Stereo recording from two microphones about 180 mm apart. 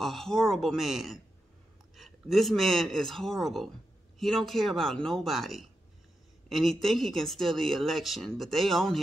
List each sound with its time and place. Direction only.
0.0 s speech: centre (ahead or behind)